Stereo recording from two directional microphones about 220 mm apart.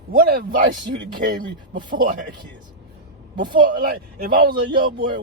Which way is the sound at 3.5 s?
40° right (ahead or behind).